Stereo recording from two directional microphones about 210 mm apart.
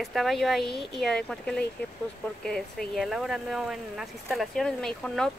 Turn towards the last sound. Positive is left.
turn(degrees=0)  # may be behind; listen again after turning